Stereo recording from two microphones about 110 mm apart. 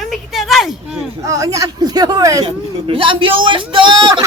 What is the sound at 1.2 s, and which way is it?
Speech, 30° right (ahead or behind).